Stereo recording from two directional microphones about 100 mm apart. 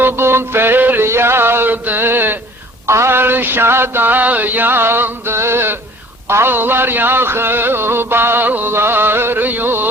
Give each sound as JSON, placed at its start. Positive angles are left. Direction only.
{"t": 0.0, "sound": "music", "side_deg": -25}